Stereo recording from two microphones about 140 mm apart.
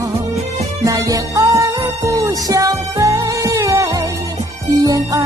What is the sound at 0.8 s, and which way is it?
Music, 25° right (ahead or behind).